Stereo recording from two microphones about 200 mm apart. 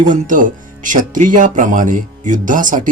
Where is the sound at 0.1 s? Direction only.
40° right (ahead or behind).